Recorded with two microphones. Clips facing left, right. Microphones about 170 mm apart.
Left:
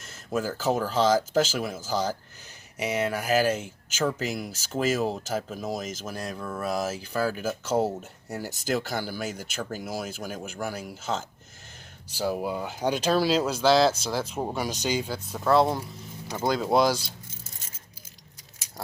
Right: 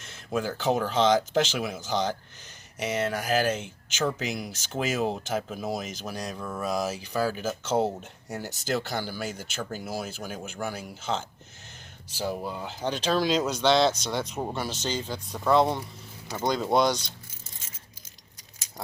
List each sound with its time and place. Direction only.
0.0 s speech: centre (ahead or behind)
12.4 s speech: 10° left (ahead or behind)